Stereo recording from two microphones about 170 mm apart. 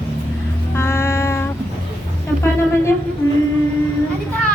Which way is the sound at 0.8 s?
15° left (ahead or behind).